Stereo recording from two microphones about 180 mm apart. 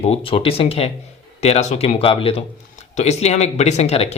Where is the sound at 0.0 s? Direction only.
30° left (ahead or behind).